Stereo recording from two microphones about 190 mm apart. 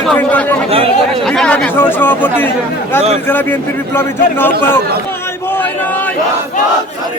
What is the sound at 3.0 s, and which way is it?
Speech, 35° right (ahead or behind).